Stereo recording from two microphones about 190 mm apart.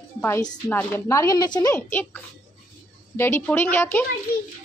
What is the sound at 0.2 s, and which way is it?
A woman's voice, 10° left (ahead or behind).